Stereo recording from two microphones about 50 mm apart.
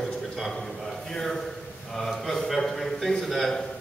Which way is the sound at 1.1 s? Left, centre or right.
Centre.